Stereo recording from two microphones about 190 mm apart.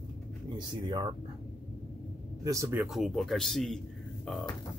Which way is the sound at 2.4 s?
15° right (ahead or behind).